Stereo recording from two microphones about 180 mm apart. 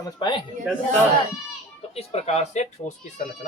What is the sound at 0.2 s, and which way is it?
Speech, 25° left (ahead or behind).